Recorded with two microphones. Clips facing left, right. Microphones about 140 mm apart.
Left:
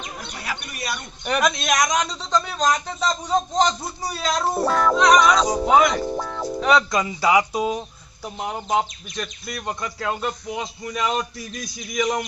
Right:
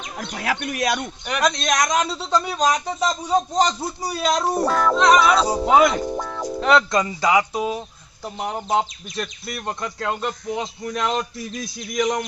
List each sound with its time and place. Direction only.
0.2 s speech: 90° right
1.4 s a man's voice: 5° left (ahead or behind); by 4.6 s 15° right (ahead or behind)
4.6 s speech: centre (ahead or behind)
6.1 s music: centre (ahead or behind)
6.5 s speech: centre (ahead or behind); by 8.3 s 15° left (ahead or behind)
8.4 s speech: centre (ahead or behind)